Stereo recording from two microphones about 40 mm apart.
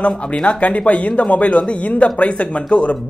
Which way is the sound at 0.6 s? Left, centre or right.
Left.